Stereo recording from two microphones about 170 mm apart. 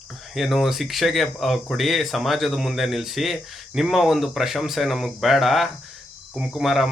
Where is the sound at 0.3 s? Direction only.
Centre (ahead or behind).